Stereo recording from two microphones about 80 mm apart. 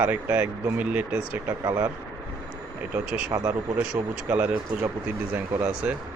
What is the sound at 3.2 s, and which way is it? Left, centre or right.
Speech, right.